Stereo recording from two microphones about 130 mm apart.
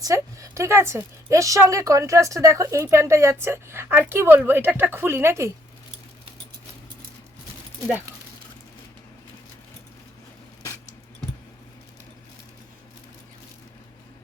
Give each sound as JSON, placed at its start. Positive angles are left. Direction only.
{"t": 0.0, "sound": "a woman's voice", "side_deg": -25}